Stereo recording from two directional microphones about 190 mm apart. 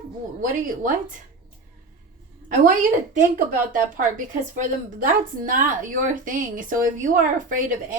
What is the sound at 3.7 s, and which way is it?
Speech, 45° right (ahead or behind).